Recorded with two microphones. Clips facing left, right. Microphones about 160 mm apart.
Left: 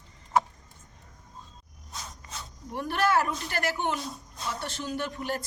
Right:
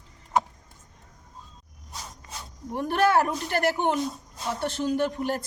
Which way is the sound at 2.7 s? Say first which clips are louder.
Right 4 dB; 50° right (ahead or behind).